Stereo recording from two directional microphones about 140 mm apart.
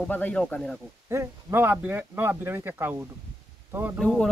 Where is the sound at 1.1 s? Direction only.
20° right (ahead or behind).